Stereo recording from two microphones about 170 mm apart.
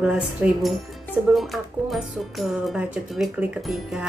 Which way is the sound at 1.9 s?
Centre (ahead or behind).